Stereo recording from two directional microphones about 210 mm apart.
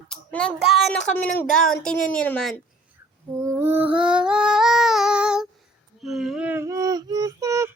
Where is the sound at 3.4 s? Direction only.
15° right (ahead or behind).